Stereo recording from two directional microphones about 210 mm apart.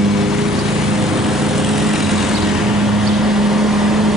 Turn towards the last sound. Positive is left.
turn(degrees=0)  # may be behind; listen again after turning